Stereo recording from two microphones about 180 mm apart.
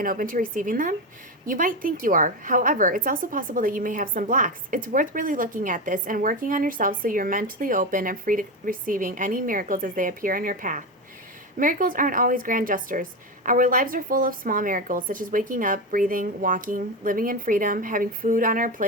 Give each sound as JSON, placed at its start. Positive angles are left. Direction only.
{"t": 0.0, "sound": "a woman's voice", "side_deg": -50}